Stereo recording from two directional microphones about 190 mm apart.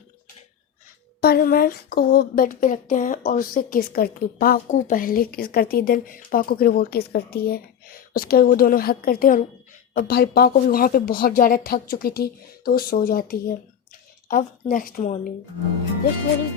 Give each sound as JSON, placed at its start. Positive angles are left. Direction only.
{"t": 1.2, "sound": "a woman's voice", "side_deg": 50}